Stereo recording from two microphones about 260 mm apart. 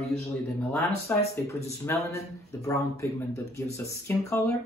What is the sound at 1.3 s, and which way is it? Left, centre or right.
Speech, centre.